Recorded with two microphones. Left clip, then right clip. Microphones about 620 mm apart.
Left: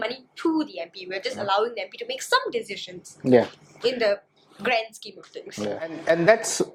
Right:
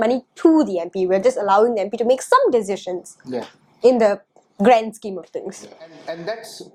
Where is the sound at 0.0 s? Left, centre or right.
Right.